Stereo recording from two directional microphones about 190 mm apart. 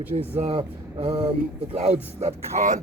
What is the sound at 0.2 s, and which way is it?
Speech, 30° right (ahead or behind).